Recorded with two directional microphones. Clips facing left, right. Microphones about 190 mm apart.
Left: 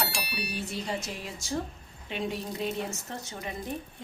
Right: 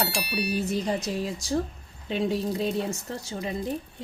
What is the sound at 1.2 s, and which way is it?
A woman's voice, 35° right (ahead or behind).